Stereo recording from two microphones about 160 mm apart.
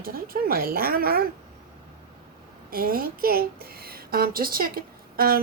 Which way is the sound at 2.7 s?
70° right (ahead or behind).